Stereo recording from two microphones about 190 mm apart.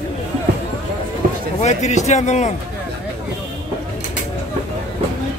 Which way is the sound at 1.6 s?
35° left (ahead or behind).